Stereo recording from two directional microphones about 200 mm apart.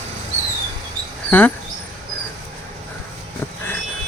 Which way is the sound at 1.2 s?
10° left (ahead or behind).